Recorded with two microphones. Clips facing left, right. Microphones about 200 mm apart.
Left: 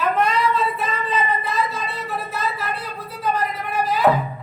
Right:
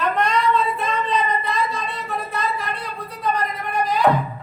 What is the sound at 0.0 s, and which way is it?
Child singing, 5° left (ahead or behind).